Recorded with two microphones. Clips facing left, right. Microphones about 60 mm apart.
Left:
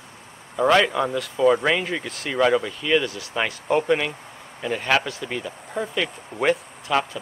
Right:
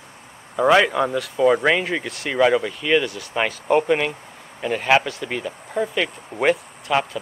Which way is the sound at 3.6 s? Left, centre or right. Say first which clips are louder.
Right 2 dB; centre.